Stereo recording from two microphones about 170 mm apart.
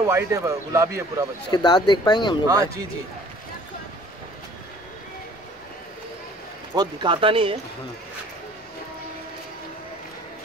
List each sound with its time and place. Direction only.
0.0 s speech: 15° right (ahead or behind)
1.5 s speech: 25° left (ahead or behind)
2.4 s speech: 20° right (ahead or behind)
6.7 s speech: 25° right (ahead or behind)